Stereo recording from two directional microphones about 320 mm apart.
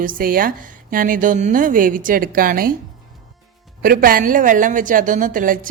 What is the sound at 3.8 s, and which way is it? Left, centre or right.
A woman's voice, right.